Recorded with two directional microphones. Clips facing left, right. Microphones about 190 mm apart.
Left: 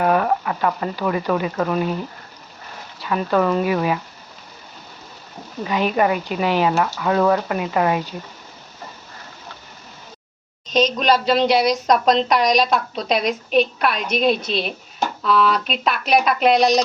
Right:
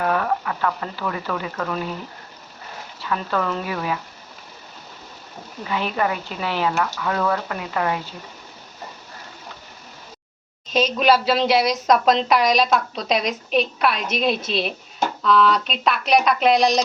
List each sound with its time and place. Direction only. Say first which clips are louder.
0.0 s speech: left 4 dB; 20° left (ahead or behind)
3.0 s speech: left 5 dB; 20° left (ahead or behind)
5.6 s speech: left 5 dB; 15° left (ahead or behind)
10.7 s speech: even; 5° right (ahead or behind)